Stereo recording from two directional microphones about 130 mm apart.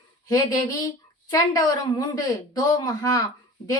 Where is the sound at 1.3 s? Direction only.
30° left (ahead or behind).